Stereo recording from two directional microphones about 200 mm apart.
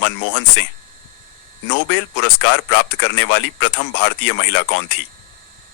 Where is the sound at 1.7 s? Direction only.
65° left (ahead or behind).